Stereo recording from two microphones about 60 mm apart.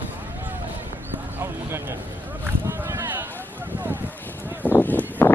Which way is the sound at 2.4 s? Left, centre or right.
Right.